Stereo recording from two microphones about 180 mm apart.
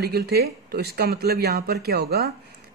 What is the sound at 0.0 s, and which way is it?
Speech, 65° right (ahead or behind).